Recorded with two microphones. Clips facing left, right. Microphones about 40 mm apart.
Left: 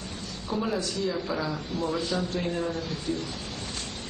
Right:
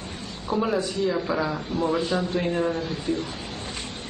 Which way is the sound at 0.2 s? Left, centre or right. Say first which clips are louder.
Right 5 dB; right.